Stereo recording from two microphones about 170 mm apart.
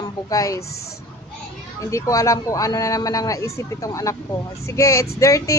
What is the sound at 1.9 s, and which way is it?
A man's voice, 20° left (ahead or behind).